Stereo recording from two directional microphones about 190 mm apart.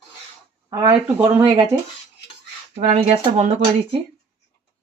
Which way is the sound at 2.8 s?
35° right (ahead or behind).